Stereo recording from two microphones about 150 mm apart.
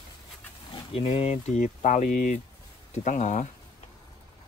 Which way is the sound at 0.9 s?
45° left (ahead or behind).